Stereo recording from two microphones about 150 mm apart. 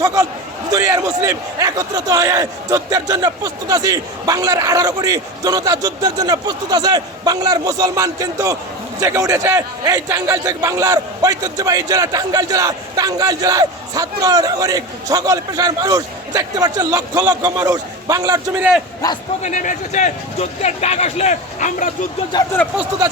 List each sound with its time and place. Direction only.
0.0 s a man's voice: 25° right (ahead or behind)
19.0 s a man's voice: 25° left (ahead or behind)
19.4 s speech: 55° left (ahead or behind)
22.3 s speech: 30° left (ahead or behind)